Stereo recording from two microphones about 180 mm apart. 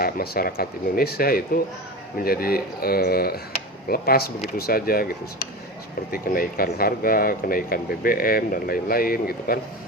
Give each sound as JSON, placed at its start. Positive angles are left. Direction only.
{"t": 0.0, "sound": "speech", "side_deg": 55}